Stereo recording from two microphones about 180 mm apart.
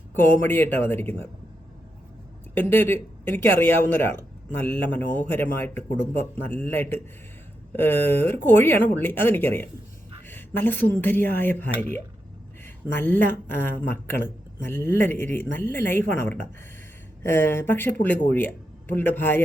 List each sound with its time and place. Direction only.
0.1 s speech: 10° left (ahead or behind)
2.6 s speech: 10° left (ahead or behind)